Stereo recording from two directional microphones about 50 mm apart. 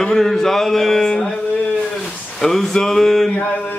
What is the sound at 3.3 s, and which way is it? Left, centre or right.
Mantra, left.